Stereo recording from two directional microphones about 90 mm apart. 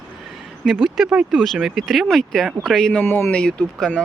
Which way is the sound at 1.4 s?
Centre (ahead or behind).